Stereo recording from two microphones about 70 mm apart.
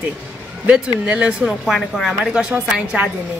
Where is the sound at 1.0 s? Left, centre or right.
Centre.